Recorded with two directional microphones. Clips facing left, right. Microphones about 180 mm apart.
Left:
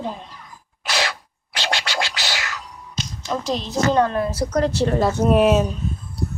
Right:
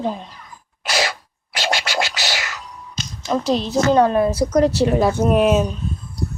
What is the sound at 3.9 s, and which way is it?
A woman's voice, 15° right (ahead or behind).